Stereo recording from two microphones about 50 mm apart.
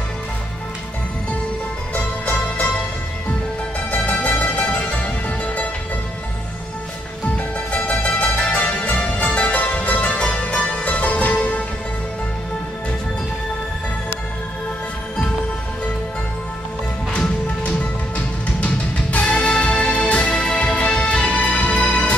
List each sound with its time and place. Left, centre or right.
2.0 s music: left
3.9 s music: left
7.3 s music: left
17.6 s music: left